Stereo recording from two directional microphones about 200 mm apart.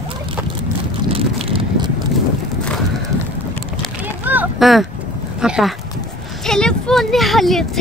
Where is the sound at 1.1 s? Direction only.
25° right (ahead or behind).